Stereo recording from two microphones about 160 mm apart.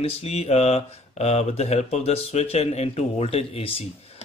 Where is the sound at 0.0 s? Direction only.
40° left (ahead or behind).